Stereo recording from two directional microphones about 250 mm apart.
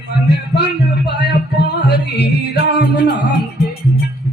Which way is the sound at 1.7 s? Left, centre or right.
Left.